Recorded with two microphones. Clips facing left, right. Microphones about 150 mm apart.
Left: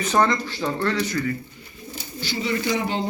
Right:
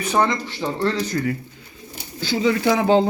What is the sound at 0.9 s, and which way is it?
Speech, 40° right (ahead or behind).